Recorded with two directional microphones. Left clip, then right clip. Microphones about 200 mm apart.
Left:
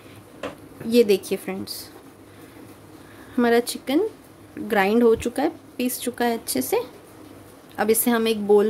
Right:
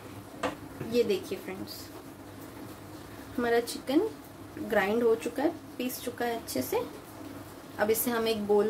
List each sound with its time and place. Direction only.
0.9 s speech: 60° left (ahead or behind)
3.3 s a woman's voice: 55° left (ahead or behind)